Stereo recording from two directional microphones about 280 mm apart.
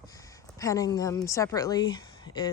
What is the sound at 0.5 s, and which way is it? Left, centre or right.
A woman's voice, centre.